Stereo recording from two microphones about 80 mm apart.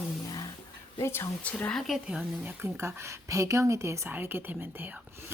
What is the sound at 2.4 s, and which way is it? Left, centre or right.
Speech, right.